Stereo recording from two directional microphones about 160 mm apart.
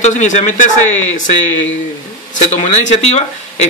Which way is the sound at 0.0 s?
50° left (ahead or behind).